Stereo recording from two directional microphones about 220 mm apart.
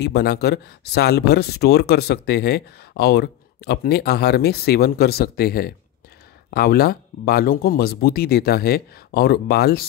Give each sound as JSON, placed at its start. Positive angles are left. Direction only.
{"t": 0.0, "sound": "speech", "side_deg": 50}